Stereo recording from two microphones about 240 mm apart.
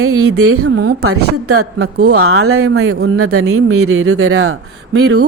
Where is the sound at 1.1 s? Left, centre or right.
Right.